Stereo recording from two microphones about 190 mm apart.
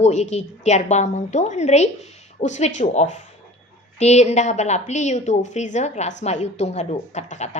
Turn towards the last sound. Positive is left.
turn(degrees=35)  # may be behind; listen again after turning